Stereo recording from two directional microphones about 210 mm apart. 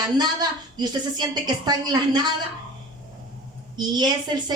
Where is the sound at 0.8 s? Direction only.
20° right (ahead or behind).